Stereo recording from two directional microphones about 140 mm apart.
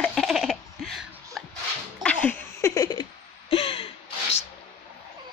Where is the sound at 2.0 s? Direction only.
10° left (ahead or behind); by 3.0 s 25° left (ahead or behind).